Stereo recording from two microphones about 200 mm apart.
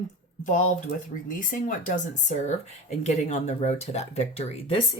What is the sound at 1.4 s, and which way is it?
Speech, 45° left (ahead or behind).